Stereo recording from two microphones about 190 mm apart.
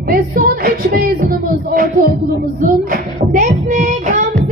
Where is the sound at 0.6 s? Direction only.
50° right (ahead or behind).